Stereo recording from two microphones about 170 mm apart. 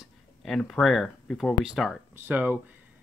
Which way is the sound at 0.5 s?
5° left (ahead or behind).